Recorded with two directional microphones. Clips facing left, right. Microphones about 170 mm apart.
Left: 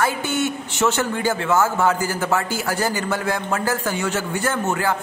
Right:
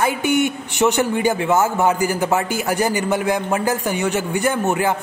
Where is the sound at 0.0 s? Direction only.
15° right (ahead or behind).